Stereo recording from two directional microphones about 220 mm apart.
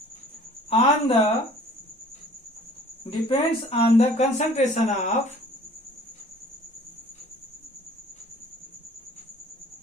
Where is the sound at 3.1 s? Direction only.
25° left (ahead or behind).